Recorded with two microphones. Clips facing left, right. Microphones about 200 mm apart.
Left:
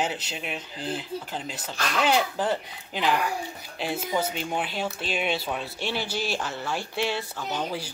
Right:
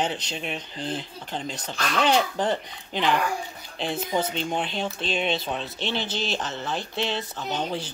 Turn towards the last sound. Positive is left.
turn(degrees=-25)  # may be behind; listen again after turning